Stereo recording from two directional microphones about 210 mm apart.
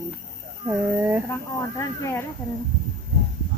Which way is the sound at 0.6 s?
10° right (ahead or behind).